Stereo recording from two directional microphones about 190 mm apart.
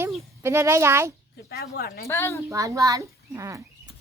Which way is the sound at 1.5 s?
55° left (ahead or behind).